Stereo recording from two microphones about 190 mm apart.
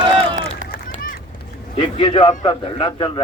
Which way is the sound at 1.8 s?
25° left (ahead or behind).